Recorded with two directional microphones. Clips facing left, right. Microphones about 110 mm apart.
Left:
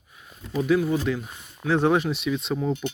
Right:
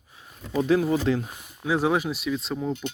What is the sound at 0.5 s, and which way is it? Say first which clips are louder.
Speech: even; 35° right (ahead or behind).